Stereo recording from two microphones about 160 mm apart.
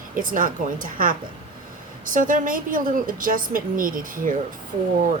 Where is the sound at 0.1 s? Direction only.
55° right (ahead or behind).